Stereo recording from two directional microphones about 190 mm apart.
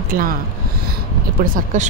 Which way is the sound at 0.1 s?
45° right (ahead or behind).